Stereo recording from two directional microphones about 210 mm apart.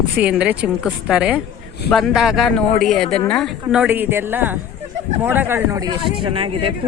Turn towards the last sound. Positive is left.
turn(degrees=-25)  # may be behind; listen again after turning